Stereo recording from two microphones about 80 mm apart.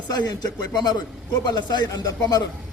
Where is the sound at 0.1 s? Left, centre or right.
Left.